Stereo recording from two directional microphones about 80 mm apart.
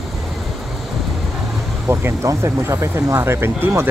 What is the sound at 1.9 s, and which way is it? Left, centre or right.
Speech, right.